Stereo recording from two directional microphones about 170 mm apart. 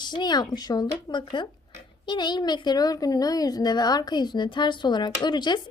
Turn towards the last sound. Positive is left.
turn(degrees=25)  # may be behind; listen again after turning